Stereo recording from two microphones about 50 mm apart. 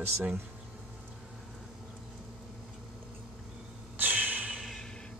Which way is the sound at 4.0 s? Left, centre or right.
Right.